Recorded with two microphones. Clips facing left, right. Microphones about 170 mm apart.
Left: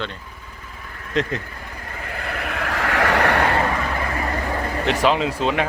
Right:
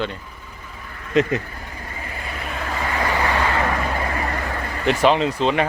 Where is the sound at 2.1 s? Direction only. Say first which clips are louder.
Left 4 dB; 65° left (ahead or behind).